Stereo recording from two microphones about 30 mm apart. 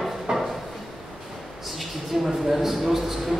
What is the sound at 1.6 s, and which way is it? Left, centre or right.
A man's voice, centre.